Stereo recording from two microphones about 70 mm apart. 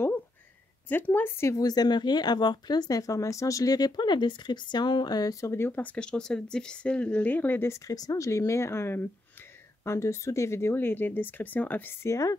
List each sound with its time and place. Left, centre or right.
0.8 s speech: left
1.6 s speech: left
5.3 s speech: left
5.7 s speech: left
5.9 s speech: centre; by 7.7 s left
7.7 s speech: left